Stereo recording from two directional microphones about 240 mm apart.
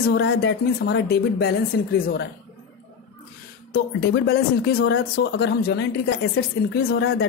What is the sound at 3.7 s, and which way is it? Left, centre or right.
Speech, left.